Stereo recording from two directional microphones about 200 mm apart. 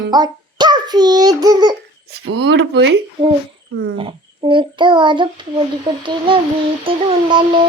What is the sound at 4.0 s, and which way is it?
A child's voice, 25° right (ahead or behind).